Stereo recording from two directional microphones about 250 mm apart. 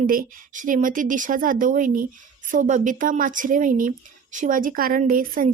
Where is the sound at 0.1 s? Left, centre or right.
Right.